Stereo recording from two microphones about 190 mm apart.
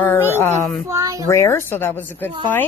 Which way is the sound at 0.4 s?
5° left (ahead or behind).